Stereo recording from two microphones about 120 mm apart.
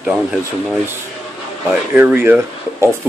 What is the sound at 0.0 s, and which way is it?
Speech, 10° right (ahead or behind).